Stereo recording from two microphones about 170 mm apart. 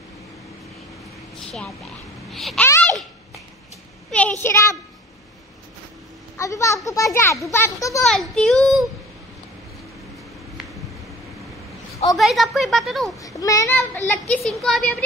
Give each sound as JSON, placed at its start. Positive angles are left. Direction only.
{"t": 1.4, "sound": "a sound", "side_deg": 5}
{"t": 2.3, "sound": "speech", "side_deg": 5}
{"t": 2.8, "sound": "a sound", "side_deg": 5}
{"t": 4.1, "sound": "a sound", "side_deg": 10}
{"t": 6.3, "sound": "a child's voice", "side_deg": 20}
{"t": 8.0, "sound": "speech", "side_deg": 0}
{"t": 12.2, "sound": "speech", "side_deg": 0}
{"t": 13.2, "sound": "a child's voice", "side_deg": 20}
{"t": 14.3, "sound": "speech", "side_deg": 0}